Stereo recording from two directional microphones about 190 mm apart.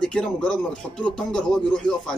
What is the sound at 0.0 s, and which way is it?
Speech, 5° left (ahead or behind).